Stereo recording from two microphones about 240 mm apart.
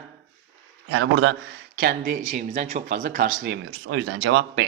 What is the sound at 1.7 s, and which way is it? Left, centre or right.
Speech, right.